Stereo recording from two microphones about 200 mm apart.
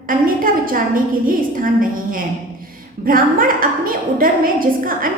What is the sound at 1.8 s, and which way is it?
A woman's voice, 45° right (ahead or behind).